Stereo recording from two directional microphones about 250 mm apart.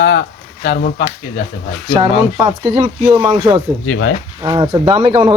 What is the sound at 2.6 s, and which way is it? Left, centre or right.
Speech, centre.